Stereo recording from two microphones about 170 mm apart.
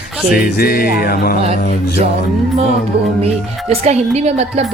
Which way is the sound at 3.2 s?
35° right (ahead or behind).